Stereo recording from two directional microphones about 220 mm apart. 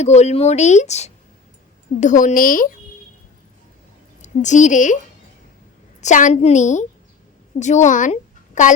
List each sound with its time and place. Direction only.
0.0 s speech: 30° left (ahead or behind)
4.2 s a woman's voice: 35° left (ahead or behind)
6.0 s a woman's voice: 35° left (ahead or behind)